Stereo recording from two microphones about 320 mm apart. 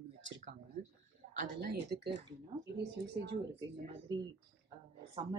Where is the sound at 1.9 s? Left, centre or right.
Right.